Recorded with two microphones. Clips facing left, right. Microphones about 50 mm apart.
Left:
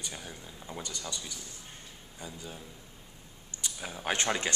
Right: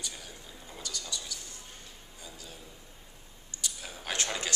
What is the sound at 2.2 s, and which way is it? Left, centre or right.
Speech, left.